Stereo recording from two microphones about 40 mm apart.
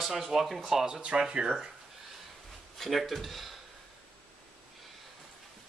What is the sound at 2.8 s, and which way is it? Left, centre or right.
Speech, centre.